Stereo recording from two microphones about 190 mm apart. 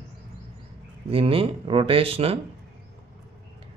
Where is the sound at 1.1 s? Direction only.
30° right (ahead or behind).